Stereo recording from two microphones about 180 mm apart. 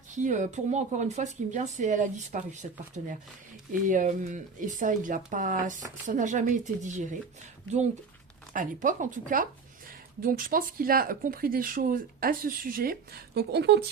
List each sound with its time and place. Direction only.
0.1 s speech: 40° right (ahead or behind)
8.5 s speech: 45° right (ahead or behind); by 13.8 s 70° right (ahead or behind)